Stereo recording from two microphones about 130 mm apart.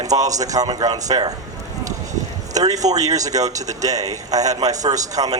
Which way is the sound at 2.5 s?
25° right (ahead or behind).